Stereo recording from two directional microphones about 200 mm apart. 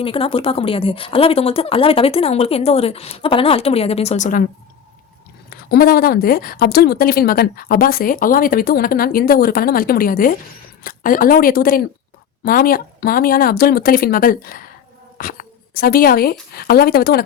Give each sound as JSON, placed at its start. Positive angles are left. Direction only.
{"t": 0.0, "sound": "speech", "side_deg": 25}
{"t": 5.5, "sound": "a woman's voice", "side_deg": 45}